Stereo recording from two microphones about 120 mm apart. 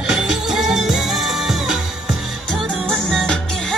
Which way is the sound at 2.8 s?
5° left (ahead or behind).